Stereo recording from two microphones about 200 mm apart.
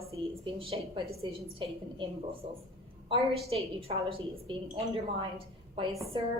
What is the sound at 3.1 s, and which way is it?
Speech, 30° right (ahead or behind).